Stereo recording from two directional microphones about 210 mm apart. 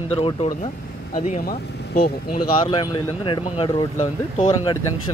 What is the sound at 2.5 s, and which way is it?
Speech, 20° left (ahead or behind).